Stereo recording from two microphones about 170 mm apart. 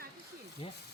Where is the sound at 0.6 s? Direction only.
30° left (ahead or behind).